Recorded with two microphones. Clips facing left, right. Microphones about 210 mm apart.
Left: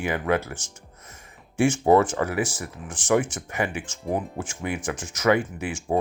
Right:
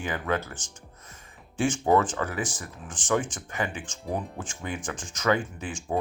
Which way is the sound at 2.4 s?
10° left (ahead or behind).